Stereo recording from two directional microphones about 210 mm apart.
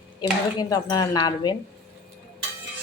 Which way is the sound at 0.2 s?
20° left (ahead or behind).